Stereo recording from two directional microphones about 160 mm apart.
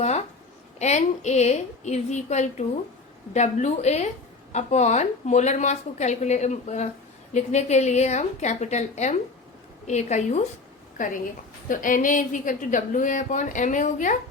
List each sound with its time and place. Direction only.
0.8 s a woman's voice: 45° left (ahead or behind)